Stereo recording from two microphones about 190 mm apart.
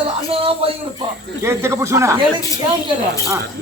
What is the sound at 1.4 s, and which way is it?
Speech, 15° right (ahead or behind).